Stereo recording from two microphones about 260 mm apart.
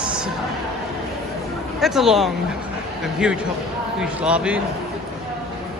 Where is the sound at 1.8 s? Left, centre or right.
Centre.